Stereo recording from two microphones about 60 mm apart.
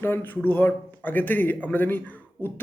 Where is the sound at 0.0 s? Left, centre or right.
Left.